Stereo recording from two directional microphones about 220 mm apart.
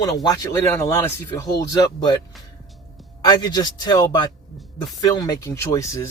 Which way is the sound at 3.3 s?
20° left (ahead or behind).